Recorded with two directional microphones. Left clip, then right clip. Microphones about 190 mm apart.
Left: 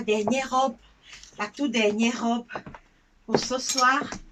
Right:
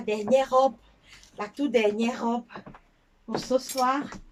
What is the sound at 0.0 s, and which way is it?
Speech, 25° right (ahead or behind).